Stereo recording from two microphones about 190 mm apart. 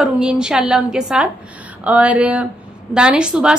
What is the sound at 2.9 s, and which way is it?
Speech, 5° right (ahead or behind).